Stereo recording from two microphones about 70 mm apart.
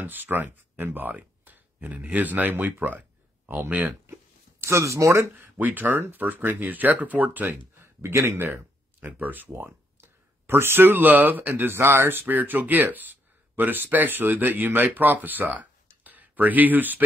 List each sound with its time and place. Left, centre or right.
0.0 s speech: right
4.1 s a sound: right
5.3 s speech: right
7.8 s speech: right
9.0 s speech: right